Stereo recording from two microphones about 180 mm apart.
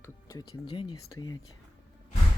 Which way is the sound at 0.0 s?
20° left (ahead or behind).